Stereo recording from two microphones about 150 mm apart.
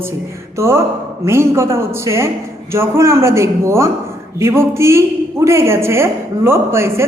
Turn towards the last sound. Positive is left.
turn(degrees=-15)  # may be behind; listen again after turning